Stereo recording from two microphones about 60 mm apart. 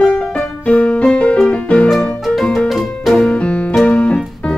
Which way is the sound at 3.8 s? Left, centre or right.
Left.